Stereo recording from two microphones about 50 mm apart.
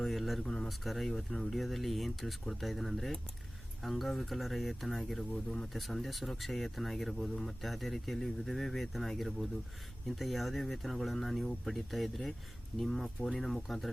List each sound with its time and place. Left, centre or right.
0.0 s speech: centre